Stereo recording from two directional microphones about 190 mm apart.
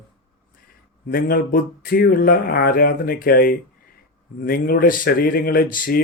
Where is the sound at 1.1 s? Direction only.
50° left (ahead or behind).